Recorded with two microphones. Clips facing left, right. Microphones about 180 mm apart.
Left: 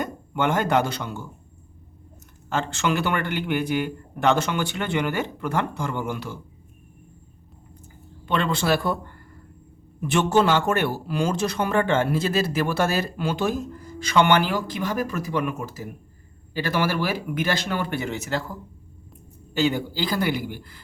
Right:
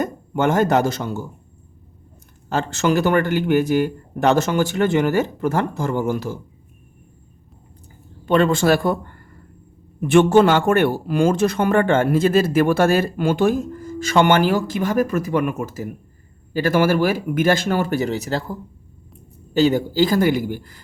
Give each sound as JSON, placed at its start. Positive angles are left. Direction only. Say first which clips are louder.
{"t": 0.0, "sound": "speech", "louder": "right 5 dB", "side_deg": -40}
{"t": 2.5, "sound": "a man's voice", "louder": "right 5 dB", "side_deg": -40}
{"t": 8.2, "sound": "speech", "louder": "right 8 dB", "side_deg": -45}
{"t": 19.5, "sound": "speech", "louder": "right 7 dB", "side_deg": -40}